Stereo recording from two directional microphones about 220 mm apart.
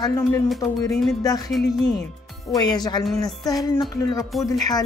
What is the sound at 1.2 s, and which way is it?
Speech, 15° left (ahead or behind).